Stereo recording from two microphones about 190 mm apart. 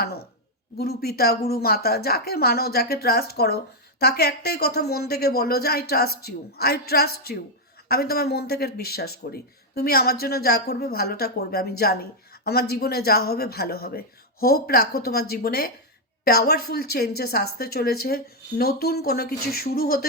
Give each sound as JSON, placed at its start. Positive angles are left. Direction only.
{"t": 0.8, "sound": "speech", "side_deg": 55}